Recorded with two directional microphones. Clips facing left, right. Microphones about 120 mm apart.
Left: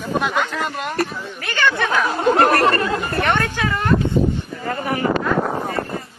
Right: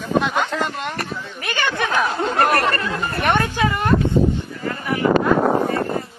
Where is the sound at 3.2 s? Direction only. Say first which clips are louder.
Right 3 dB; 15° right (ahead or behind).